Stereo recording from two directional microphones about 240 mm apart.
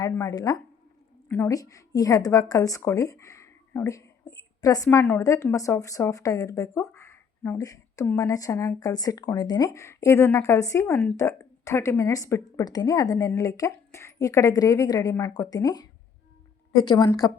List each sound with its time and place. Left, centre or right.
0.0 s a woman's voice: centre